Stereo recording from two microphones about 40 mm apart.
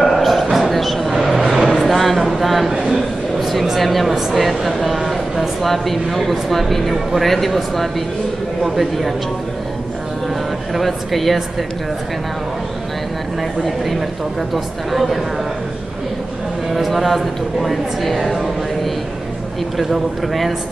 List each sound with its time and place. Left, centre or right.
0.0 s a sound: centre
1.6 s vehicle: centre
2.1 s a sound: centre
3.6 s speech: centre
10.7 s speech: centre
13.7 s speech: centre
16.7 s speech: centre
19.8 s speech: centre